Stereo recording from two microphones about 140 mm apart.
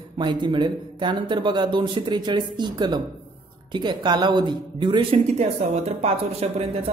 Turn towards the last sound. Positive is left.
turn(degrees=-45)  # may be behind; listen again after turning